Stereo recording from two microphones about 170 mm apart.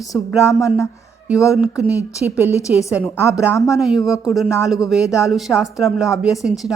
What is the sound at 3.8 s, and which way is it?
A woman's voice, centre (ahead or behind).